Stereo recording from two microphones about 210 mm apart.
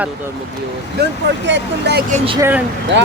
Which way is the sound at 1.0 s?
50° right (ahead or behind).